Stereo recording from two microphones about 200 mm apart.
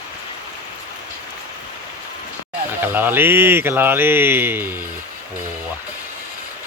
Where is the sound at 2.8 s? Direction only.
10° right (ahead or behind).